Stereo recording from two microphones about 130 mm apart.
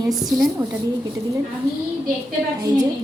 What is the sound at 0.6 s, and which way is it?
Speech, 25° right (ahead or behind).